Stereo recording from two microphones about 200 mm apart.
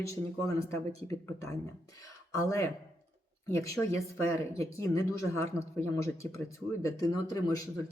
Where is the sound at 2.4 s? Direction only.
15° left (ahead or behind).